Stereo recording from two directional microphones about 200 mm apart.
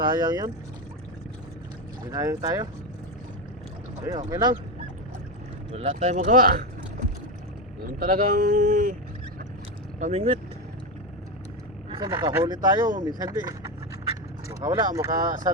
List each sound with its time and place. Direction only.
0.0 s speech: 20° right (ahead or behind)
2.0 s speech: 15° right (ahead or behind)
4.3 s speech: 20° right (ahead or behind)
5.7 s speech: 30° right (ahead or behind)
7.9 s speech: 50° right (ahead or behind)
10.0 s speech: 35° right (ahead or behind)
11.9 s a sound: 25° right (ahead or behind)
12.1 s speech: 15° right (ahead or behind)